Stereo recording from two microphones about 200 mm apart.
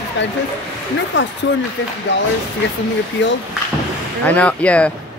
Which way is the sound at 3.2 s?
65° left (ahead or behind).